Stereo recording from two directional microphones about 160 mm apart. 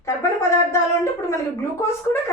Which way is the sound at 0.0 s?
15° left (ahead or behind).